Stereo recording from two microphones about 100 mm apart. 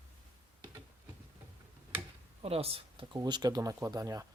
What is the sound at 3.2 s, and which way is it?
Speech, 45° right (ahead or behind).